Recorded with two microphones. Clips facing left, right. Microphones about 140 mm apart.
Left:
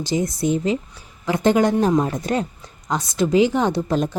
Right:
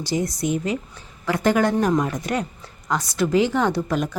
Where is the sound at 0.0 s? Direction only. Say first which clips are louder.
Left 2 dB; 20° left (ahead or behind).